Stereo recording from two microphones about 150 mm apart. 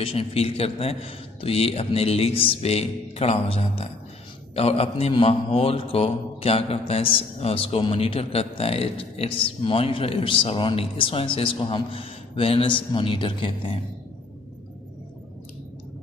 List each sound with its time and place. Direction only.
0.0 s a man's voice: 40° left (ahead or behind)